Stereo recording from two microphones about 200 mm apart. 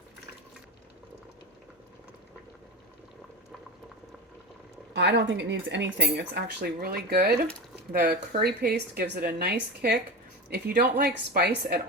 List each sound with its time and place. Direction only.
4.9 s a woman's voice: 65° right (ahead or behind)